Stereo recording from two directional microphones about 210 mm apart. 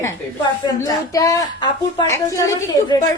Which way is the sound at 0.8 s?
15° left (ahead or behind).